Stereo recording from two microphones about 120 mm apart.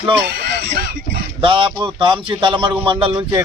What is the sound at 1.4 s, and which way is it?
A man's voice, 45° right (ahead or behind).